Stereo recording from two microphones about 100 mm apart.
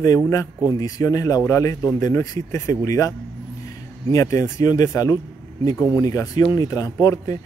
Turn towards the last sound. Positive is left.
turn(degrees=35)  # may be behind; listen again after turning